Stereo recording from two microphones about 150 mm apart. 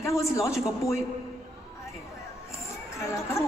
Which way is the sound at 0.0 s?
20° left (ahead or behind).